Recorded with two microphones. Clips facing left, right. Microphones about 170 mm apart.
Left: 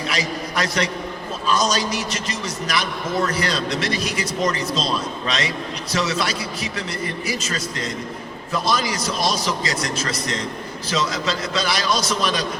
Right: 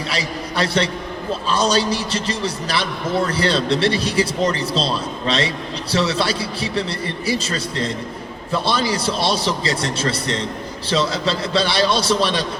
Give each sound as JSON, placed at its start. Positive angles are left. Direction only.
{"t": 0.1, "sound": "a man's voice", "side_deg": -30}